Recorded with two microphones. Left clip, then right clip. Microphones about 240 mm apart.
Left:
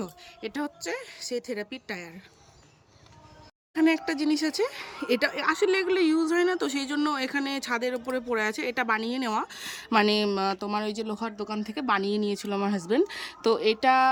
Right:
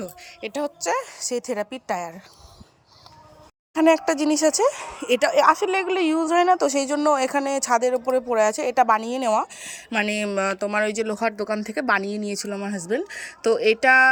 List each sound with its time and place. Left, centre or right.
0.0 s a woman's voice: centre
3.8 s a woman's voice: centre
4.6 s speech: right
5.5 s a woman's voice: centre